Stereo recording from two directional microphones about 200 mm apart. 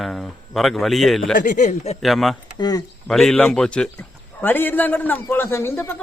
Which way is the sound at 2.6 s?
20° left (ahead or behind).